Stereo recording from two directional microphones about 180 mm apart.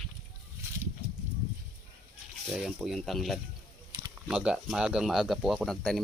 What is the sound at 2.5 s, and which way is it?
Speech, centre (ahead or behind).